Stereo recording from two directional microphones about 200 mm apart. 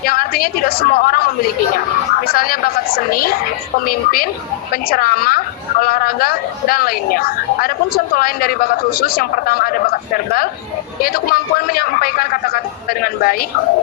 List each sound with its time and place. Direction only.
0.0 s a woman's voice: 50° left (ahead or behind)